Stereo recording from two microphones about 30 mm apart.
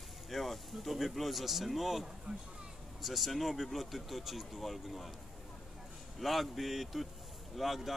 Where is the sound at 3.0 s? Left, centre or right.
Centre.